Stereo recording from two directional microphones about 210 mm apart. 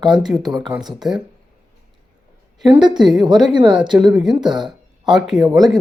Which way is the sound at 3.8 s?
5° right (ahead or behind).